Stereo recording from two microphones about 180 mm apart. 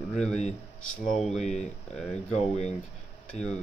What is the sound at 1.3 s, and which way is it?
Speech, 40° left (ahead or behind).